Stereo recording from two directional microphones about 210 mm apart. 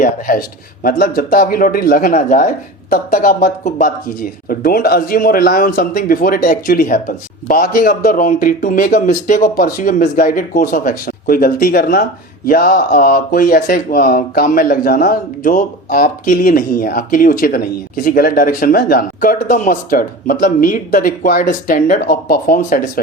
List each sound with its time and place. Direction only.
0.3 s speech: 40° left (ahead or behind)